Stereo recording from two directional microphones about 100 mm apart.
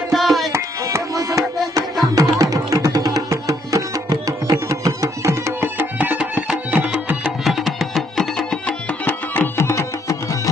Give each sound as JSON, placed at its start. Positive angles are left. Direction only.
{"t": 0.1, "sound": "tabla", "side_deg": 0}
{"t": 0.5, "sound": "music", "side_deg": -30}
{"t": 5.9, "sound": "music", "side_deg": -15}
{"t": 7.4, "sound": "music", "side_deg": 0}
{"t": 9.6, "sound": "music", "side_deg": 30}